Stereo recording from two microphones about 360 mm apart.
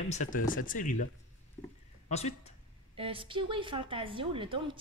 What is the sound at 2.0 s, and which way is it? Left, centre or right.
Speech, centre.